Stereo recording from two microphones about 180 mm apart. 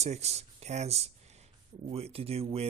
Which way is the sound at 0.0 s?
35° right (ahead or behind).